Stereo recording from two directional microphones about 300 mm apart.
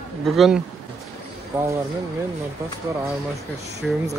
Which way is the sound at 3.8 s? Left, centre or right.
Centre.